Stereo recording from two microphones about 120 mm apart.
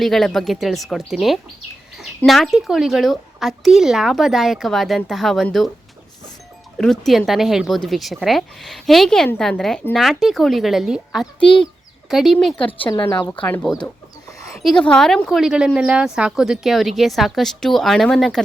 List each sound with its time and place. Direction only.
0.0 s speech: 5° left (ahead or behind)
6.7 s speech: 5° left (ahead or behind)
11.3 s speech: 45° left (ahead or behind)
11.6 s speech: centre (ahead or behind)
13.1 s speech: 25° left (ahead or behind)
13.7 s speech: centre (ahead or behind)